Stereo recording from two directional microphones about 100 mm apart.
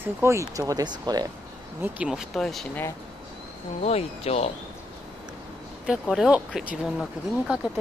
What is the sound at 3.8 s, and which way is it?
Speech, 90° left.